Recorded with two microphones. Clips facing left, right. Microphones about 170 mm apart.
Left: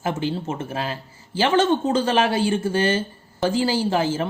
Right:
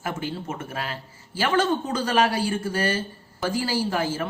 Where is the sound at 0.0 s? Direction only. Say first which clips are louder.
Left 5 dB; 25° left (ahead or behind).